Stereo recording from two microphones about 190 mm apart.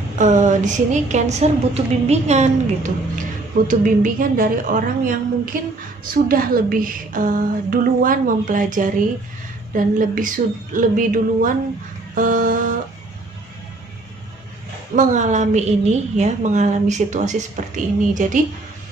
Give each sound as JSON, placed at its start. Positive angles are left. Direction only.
{"t": 0.2, "sound": "a woman's voice", "side_deg": -40}
{"t": 15.0, "sound": "a woman's voice", "side_deg": -40}